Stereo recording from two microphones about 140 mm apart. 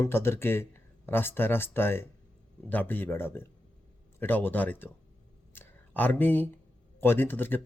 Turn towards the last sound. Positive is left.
turn(degrees=15)  # may be behind; listen again after turning